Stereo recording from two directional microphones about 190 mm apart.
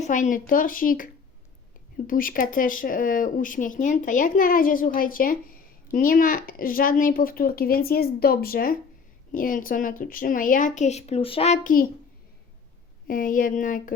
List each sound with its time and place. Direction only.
0.0 s speech: 40° left (ahead or behind)
13.1 s speech: 45° left (ahead or behind)